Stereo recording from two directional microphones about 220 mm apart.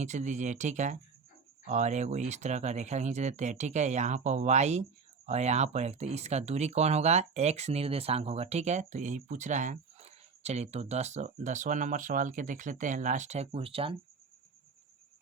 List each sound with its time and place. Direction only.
0.0 s speech: 30° right (ahead or behind)